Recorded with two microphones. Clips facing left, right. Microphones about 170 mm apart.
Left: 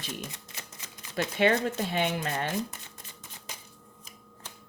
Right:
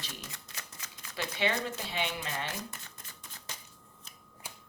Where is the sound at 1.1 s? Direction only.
50° left (ahead or behind).